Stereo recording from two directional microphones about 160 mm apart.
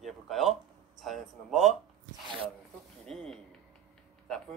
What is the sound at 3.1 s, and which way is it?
Speech, 5° left (ahead or behind).